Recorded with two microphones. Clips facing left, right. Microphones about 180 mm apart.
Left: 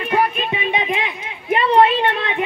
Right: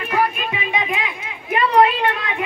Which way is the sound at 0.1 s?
25° left (ahead or behind).